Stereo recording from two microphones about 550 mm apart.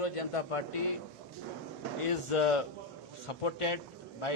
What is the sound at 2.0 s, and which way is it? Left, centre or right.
A man's voice, left.